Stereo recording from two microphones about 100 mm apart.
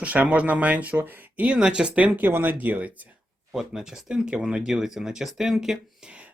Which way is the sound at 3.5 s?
5° right (ahead or behind).